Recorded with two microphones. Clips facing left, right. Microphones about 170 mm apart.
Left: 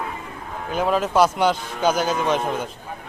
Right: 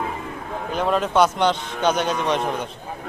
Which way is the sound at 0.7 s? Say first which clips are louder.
Left 1 dB; centre (ahead or behind).